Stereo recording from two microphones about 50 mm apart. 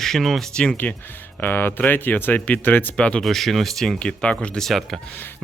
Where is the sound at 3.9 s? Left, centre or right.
Left.